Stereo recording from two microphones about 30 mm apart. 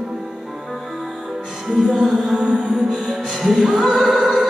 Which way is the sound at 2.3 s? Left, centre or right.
Centre.